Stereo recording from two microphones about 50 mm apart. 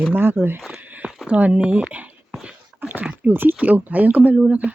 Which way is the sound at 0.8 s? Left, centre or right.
Right.